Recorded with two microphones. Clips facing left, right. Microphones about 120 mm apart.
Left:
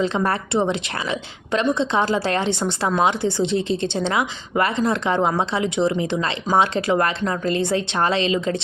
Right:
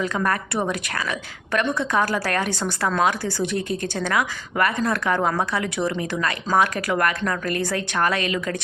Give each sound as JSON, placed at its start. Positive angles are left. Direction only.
{"t": 0.0, "sound": "a woman's voice", "side_deg": 25}